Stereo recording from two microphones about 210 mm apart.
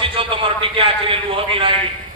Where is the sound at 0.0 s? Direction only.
25° right (ahead or behind).